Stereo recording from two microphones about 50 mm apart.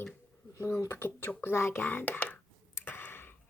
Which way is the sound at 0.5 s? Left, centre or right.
Left.